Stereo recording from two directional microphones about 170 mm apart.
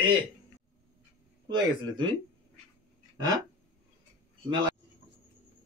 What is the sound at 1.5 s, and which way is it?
Speech, 25° right (ahead or behind).